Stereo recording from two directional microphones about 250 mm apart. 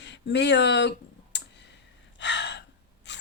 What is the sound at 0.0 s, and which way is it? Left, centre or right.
Clicking, left.